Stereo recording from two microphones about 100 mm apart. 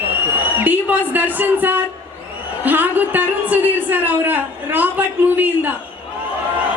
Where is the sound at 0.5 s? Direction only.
20° right (ahead or behind).